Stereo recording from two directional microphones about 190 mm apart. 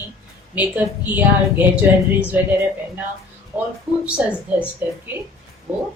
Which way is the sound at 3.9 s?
5° right (ahead or behind).